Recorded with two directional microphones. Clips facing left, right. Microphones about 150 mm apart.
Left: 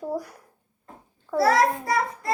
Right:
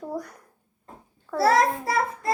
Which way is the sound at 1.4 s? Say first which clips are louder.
Even; 25° right (ahead or behind).